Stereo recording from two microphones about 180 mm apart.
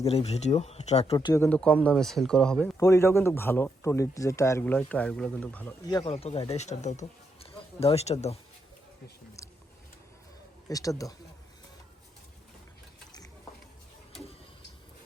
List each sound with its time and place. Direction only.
0.0 s speech: 35° left (ahead or behind)
1.1 s speech: 20° left (ahead or behind)
1.5 s speech: 5° left (ahead or behind)
5.9 s speech: 20° left (ahead or behind)
6.1 s speech: 35° left (ahead or behind)
10.7 s speech: 20° left (ahead or behind)